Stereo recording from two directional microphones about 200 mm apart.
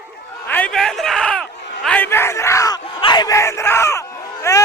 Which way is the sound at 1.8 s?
10° left (ahead or behind).